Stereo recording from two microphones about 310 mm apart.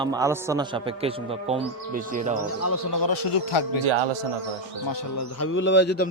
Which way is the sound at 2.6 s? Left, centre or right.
Left.